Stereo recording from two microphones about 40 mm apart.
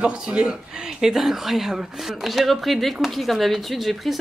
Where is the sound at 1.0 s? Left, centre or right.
Centre.